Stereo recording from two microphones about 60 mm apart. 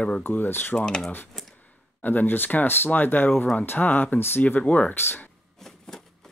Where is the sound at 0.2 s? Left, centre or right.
Left.